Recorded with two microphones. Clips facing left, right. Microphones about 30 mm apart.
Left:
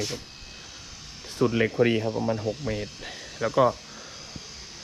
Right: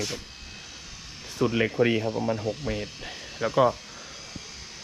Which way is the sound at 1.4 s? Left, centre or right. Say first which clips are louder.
Left 1 dB; right.